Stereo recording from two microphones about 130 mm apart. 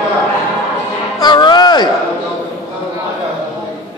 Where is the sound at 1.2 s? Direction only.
35° left (ahead or behind).